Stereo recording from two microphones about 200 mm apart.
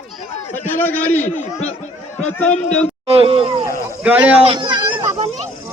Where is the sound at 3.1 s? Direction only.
30° right (ahead or behind).